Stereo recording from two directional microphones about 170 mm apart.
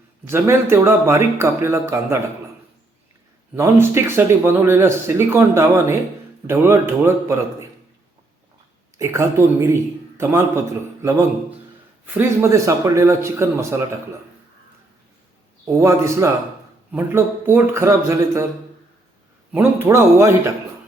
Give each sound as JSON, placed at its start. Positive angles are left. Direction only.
{"t": 0.3, "sound": "speech", "side_deg": -15}
{"t": 3.5, "sound": "speech", "side_deg": -15}
{"t": 9.0, "sound": "speech", "side_deg": -15}
{"t": 12.1, "sound": "speech", "side_deg": -15}
{"t": 15.6, "sound": "speech", "side_deg": -20}
{"t": 19.5, "sound": "speech", "side_deg": -15}